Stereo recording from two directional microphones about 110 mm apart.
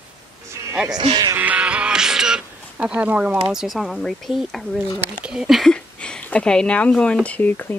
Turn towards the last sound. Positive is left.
turn(degrees=15)  # may be behind; listen again after turning